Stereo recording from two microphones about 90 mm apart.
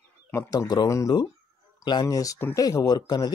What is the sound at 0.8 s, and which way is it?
Speech, 35° left (ahead or behind).